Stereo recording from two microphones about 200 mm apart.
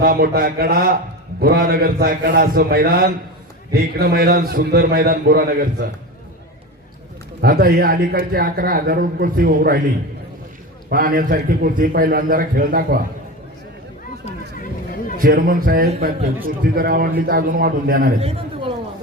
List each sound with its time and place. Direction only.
0.0 s a man's voice: 50° right (ahead or behind)
7.4 s a man's voice: 45° right (ahead or behind)
10.8 s a man's voice: 45° right (ahead or behind)
14.3 s music: 45° left (ahead or behind)
15.2 s a man's voice: 45° right (ahead or behind)
18.2 s a man's voice: 30° right (ahead or behind)